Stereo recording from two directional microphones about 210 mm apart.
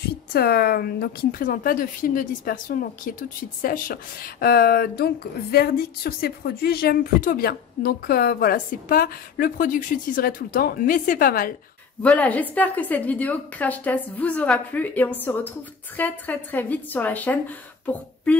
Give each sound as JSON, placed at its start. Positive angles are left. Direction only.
{"t": 0.3, "sound": "a woman's voice", "side_deg": 45}
{"t": 12.0, "sound": "a woman's voice", "side_deg": 5}